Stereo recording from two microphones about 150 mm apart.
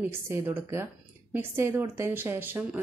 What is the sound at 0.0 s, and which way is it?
A woman's voice, 15° right (ahead or behind).